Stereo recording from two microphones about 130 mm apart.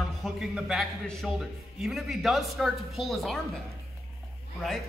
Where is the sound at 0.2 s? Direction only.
5° right (ahead or behind).